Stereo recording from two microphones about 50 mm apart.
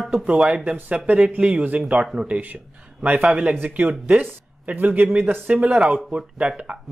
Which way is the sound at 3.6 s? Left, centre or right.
Right.